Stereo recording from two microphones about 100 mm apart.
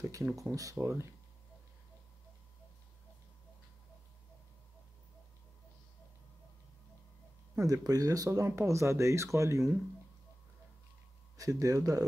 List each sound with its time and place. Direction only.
0.0 s speech: 30° right (ahead or behind)
7.5 s speech: 35° right (ahead or behind)
11.3 s speech: 35° right (ahead or behind)